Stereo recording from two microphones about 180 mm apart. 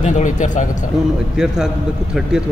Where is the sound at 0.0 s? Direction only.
45° left (ahead or behind).